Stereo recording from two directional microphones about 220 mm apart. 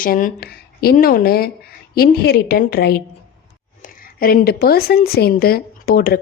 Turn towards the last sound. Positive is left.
turn(degrees=45)  # may be behind; listen again after turning